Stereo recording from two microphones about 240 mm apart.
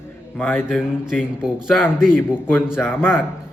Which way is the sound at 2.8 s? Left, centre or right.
Centre.